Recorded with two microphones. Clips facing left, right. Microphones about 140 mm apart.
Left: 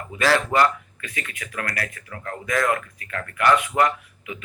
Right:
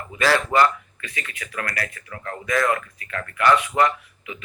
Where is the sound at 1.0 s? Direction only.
50° left (ahead or behind).